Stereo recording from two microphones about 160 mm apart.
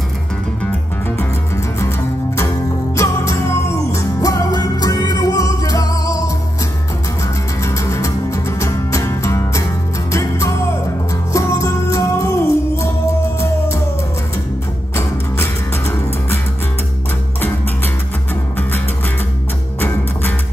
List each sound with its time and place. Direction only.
1.8 s music: 15° left (ahead or behind)
7.6 s music: 20° left (ahead or behind)
15.0 s music: 15° left (ahead or behind)